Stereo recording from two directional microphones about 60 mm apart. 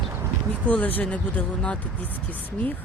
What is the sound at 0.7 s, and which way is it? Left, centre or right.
Speech, left.